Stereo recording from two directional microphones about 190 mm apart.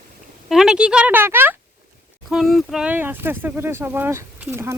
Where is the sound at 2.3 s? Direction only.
Centre (ahead or behind).